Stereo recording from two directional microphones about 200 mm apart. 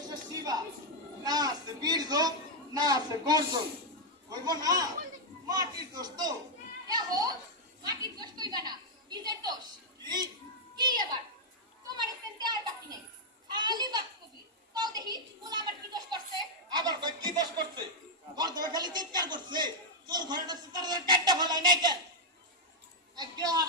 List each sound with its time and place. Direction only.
0.1 s music: 20° right (ahead or behind)
1.2 s a man's voice: 20° right (ahead or behind)
10.8 s a woman's voice: 20° right (ahead or behind)
11.9 s children playing: 20° right (ahead or behind)
16.7 s a man's voice: 20° right (ahead or behind)
23.1 s a man's voice: 20° right (ahead or behind)